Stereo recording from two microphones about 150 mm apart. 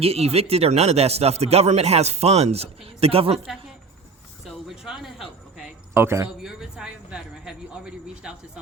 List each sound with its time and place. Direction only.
0.0 s speech: 45° right (ahead or behind)
4.4 s speech: 5° right (ahead or behind)
5.9 s speech: 15° right (ahead or behind)
6.4 s speech: 5° right (ahead or behind)